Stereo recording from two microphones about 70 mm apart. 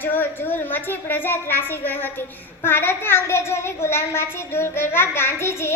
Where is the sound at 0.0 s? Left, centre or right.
Left.